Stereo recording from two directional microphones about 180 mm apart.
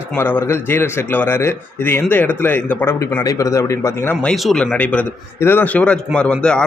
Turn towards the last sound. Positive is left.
turn(degrees=5)  # may be behind; listen again after turning